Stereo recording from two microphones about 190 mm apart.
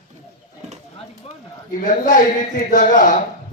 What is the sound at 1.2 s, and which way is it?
A man's voice, 35° left (ahead or behind).